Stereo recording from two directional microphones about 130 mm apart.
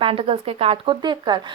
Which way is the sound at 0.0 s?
45° right (ahead or behind).